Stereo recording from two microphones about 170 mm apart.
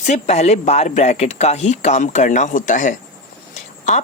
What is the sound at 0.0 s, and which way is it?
A woman's voice, 40° left (ahead or behind).